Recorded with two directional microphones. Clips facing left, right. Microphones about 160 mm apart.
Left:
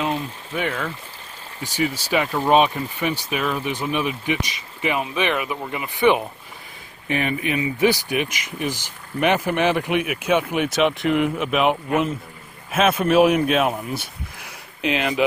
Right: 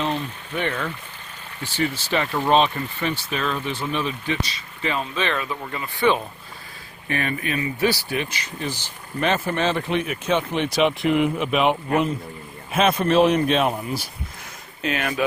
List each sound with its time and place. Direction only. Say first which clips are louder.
0.0 s a man's voice: left 1 dB; 10° left (ahead or behind)
14.8 s speech: left 3 dB; 20° left (ahead or behind)